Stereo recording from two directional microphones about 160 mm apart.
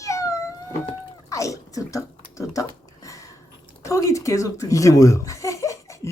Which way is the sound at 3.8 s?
20° left (ahead or behind).